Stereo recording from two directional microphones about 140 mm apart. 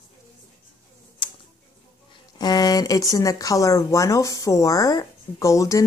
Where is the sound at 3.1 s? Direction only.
25° left (ahead or behind).